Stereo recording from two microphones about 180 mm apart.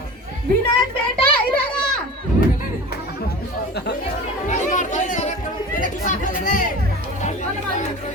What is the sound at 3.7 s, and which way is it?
Speech, 55° left (ahead or behind).